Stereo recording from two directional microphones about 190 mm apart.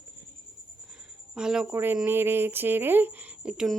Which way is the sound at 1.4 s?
5° right (ahead or behind).